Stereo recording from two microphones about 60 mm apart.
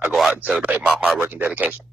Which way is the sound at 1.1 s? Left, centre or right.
Right.